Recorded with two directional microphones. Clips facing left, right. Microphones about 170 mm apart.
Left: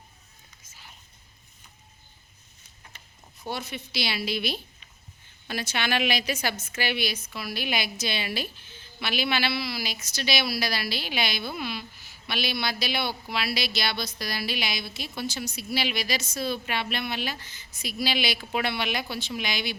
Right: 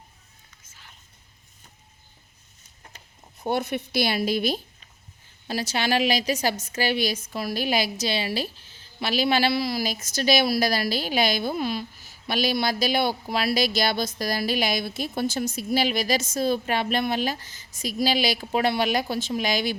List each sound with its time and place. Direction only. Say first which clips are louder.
0.7 s whispering: left 1 dB; 10° left (ahead or behind)
3.3 s a woman's voice: right 8 dB; 55° right (ahead or behind)